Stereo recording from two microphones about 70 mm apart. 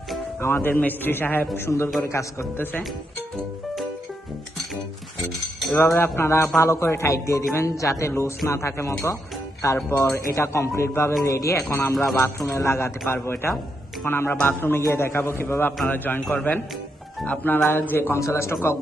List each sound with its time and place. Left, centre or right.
0.4 s a man's voice: left
5.7 s a man's voice: left
18.2 s speech: left